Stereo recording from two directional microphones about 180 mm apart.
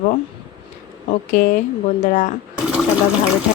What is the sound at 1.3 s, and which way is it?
A woman's voice, 50° left (ahead or behind).